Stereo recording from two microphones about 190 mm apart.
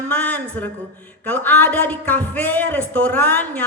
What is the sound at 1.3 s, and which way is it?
Speech, 10° left (ahead or behind).